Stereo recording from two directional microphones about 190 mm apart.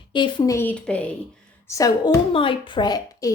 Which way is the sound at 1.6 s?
15° left (ahead or behind).